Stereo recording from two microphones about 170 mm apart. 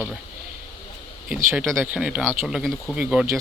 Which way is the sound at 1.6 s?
5° left (ahead or behind).